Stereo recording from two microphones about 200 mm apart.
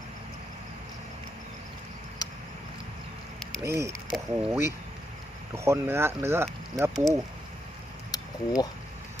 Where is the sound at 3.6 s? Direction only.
15° right (ahead or behind).